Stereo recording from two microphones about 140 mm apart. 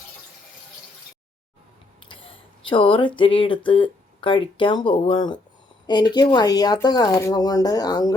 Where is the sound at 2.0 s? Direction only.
35° left (ahead or behind).